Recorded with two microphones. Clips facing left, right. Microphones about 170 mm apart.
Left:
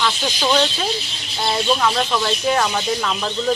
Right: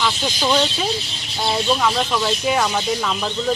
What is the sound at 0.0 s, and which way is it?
Speech, 5° right (ahead or behind).